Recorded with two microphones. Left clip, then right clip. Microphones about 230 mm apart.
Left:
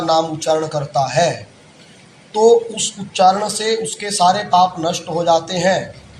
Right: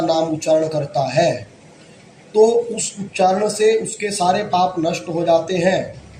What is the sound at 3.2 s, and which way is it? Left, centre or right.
Speech, left.